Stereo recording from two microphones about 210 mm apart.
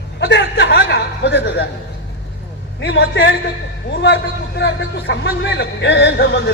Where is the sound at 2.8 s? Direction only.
60° left (ahead or behind).